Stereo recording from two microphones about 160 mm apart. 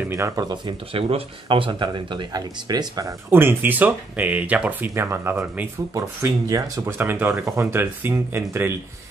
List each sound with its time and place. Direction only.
0.1 s speech: 20° right (ahead or behind)